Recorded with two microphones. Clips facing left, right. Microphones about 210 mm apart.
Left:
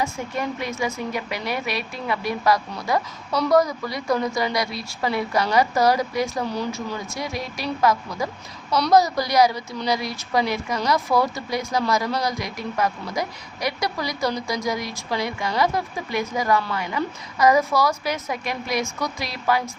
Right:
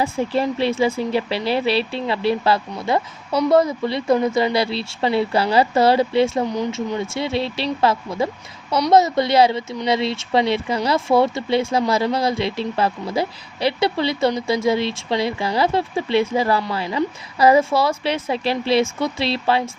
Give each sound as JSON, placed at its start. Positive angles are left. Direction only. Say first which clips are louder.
{"t": 0.0, "sound": "speech", "louder": "right 6 dB", "side_deg": -30}